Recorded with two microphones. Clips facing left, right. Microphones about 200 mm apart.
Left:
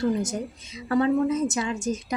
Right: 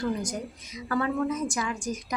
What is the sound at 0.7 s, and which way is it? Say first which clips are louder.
Speech: left 6 dB; 25° left (ahead or behind).